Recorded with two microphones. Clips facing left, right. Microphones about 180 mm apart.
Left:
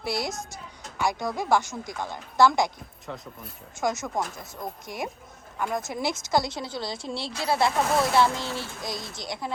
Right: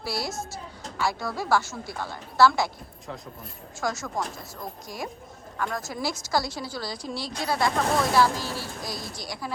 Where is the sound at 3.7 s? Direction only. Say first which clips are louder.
Left 2 dB; 20° left (ahead or behind).